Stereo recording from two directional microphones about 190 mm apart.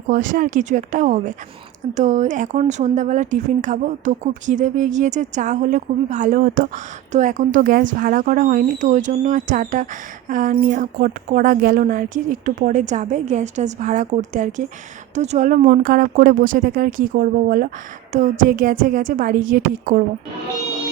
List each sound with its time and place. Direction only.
0.1 s a woman's voice: 45° right (ahead or behind)